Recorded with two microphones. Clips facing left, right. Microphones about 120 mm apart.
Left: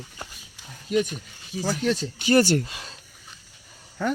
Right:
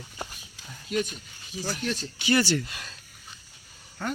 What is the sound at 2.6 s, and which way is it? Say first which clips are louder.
Speech: left 2 dB; 25° left (ahead or behind).